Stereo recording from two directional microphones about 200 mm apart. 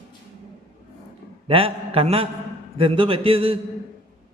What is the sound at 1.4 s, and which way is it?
A man's voice, 30° right (ahead or behind).